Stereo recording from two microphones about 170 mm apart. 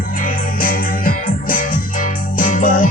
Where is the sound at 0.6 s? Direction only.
55° left (ahead or behind).